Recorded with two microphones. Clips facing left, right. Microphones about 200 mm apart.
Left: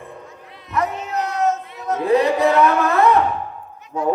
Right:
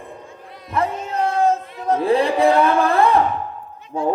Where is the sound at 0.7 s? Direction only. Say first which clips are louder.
Even; 30° right (ahead or behind).